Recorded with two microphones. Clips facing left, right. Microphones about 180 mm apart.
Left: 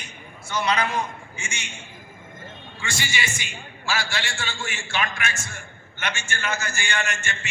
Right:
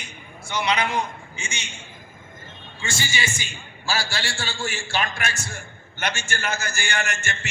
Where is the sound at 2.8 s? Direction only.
25° right (ahead or behind).